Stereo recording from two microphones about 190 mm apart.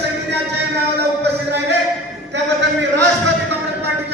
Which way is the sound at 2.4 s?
65° right (ahead or behind).